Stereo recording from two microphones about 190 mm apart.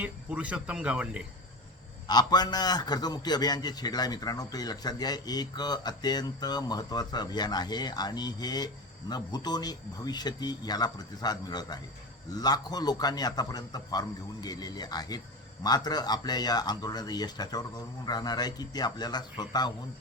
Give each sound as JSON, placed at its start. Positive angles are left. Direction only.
{"t": 0.0, "sound": "speech", "side_deg": -5}
{"t": 2.0, "sound": "a man's voice", "side_deg": 20}